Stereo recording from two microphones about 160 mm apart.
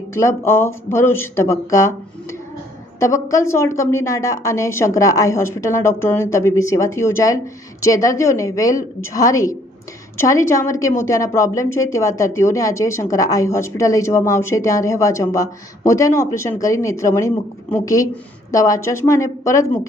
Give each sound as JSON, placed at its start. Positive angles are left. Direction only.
{"t": 0.1, "sound": "a woman's voice", "side_deg": 15}